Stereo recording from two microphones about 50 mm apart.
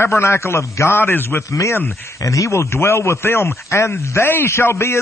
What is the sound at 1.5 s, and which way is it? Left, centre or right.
A man's voice, left.